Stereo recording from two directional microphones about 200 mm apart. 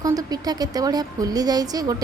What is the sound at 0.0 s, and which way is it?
A woman's voice, 20° right (ahead or behind).